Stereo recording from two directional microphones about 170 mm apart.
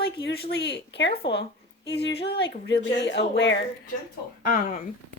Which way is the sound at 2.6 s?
90° left.